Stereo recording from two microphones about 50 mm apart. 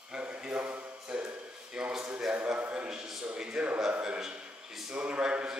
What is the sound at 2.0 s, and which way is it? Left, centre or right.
A man's voice, right.